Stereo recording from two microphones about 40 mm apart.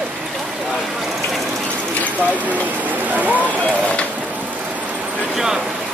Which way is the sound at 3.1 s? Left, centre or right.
Right.